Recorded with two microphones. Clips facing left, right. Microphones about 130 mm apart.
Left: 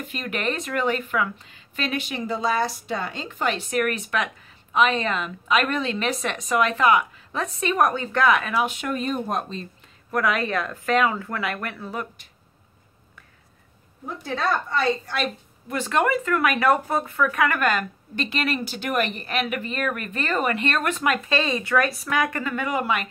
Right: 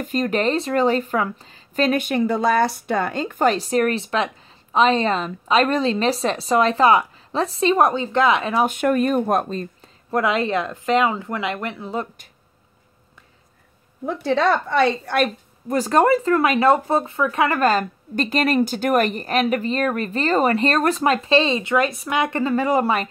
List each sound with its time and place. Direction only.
0.0 s speech: 40° right (ahead or behind)
8.6 s speech: 55° right (ahead or behind)
10.1 s speech: 25° right (ahead or behind)
14.0 s a woman's voice: 80° right
15.7 s speech: 40° right (ahead or behind)